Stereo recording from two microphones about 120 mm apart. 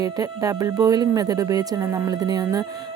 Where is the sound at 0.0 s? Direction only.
30° right (ahead or behind).